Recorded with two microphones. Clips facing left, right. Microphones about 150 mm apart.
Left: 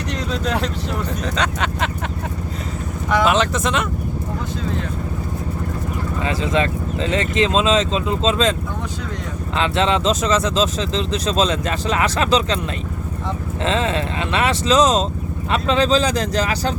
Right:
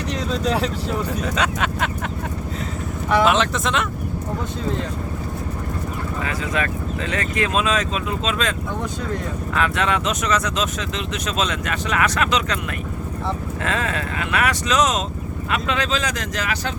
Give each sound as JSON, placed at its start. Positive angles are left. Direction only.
{"t": 0.1, "sound": "speech", "side_deg": -5}
{"t": 3.1, "sound": "speech", "side_deg": -5}
{"t": 6.2, "sound": "speech", "side_deg": 25}
{"t": 9.6, "sound": "speech", "side_deg": 25}
{"t": 13.7, "sound": "speech", "side_deg": 25}